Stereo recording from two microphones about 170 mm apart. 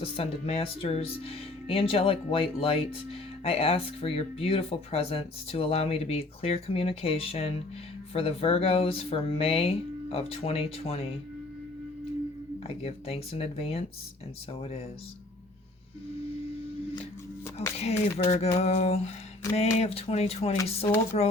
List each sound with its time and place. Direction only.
0.0 s speech: 35° left (ahead or behind)
12.6 s speech: 35° left (ahead or behind)
17.7 s speech: 40° left (ahead or behind)